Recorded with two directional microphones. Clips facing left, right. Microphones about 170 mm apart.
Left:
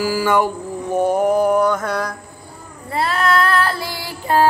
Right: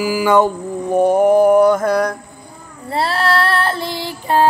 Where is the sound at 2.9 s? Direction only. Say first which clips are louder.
Right 1 dB; 30° right (ahead or behind).